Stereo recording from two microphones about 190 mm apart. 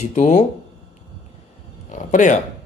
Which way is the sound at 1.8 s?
40° left (ahead or behind).